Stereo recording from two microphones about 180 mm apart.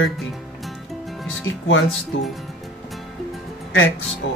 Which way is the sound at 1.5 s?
90° left.